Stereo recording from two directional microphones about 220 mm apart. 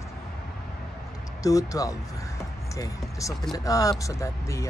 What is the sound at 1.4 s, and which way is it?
Speech, 15° left (ahead or behind).